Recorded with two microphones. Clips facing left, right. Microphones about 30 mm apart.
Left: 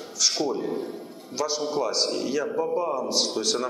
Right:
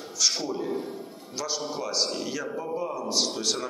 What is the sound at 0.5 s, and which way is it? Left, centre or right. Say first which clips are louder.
A man's voice: left 2 dB; centre.